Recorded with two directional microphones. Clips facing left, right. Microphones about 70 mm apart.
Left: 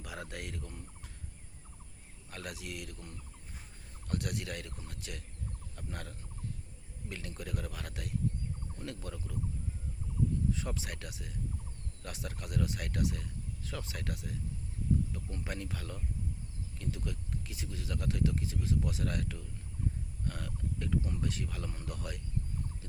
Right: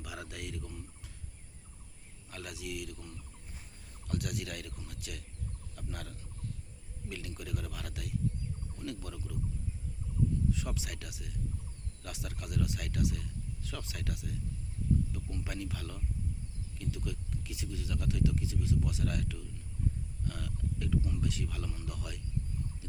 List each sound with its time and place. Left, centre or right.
0.0 s speech: left
2.3 s speech: left
4.1 s speech: left
10.5 s speech: left